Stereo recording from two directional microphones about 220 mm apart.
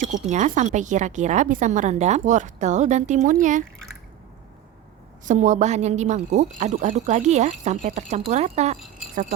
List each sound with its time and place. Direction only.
0.0 s a woman's voice: 35° right (ahead or behind)
5.2 s a woman's voice: 35° right (ahead or behind)